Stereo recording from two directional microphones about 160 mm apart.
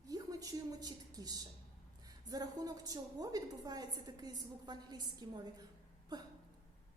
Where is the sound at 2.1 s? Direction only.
25° right (ahead or behind).